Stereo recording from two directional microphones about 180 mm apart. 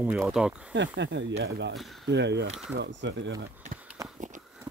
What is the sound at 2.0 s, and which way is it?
Speech, 75° right (ahead or behind).